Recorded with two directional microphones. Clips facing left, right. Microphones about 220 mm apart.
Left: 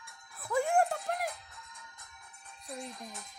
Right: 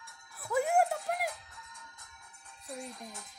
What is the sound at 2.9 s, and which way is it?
Music, 20° left (ahead or behind).